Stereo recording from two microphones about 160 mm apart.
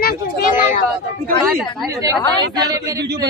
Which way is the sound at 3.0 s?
90° right.